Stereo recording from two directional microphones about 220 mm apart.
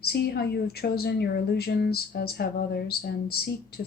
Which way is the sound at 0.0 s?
45° left (ahead or behind).